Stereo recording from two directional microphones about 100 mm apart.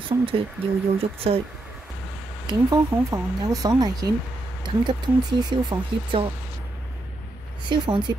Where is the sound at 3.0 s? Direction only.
35° right (ahead or behind).